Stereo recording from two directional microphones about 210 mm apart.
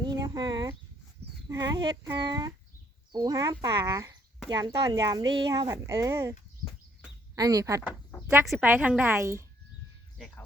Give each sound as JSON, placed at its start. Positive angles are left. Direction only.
{"t": 0.2, "sound": "speech", "side_deg": -20}
{"t": 7.3, "sound": "speech", "side_deg": -15}
{"t": 10.2, "sound": "music", "side_deg": 0}